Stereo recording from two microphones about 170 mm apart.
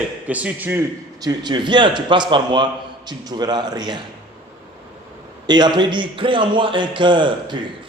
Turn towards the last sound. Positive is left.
turn(degrees=-30)  # may be behind; listen again after turning